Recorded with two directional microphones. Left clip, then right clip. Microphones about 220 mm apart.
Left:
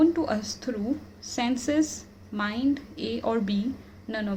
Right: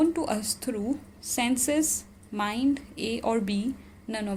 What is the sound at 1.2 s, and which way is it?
A woman's voice, 30° right (ahead or behind).